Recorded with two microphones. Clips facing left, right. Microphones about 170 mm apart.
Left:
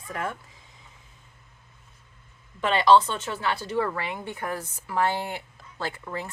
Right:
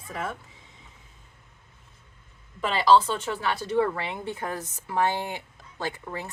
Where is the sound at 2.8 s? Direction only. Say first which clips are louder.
Left 1 dB; 10° right (ahead or behind).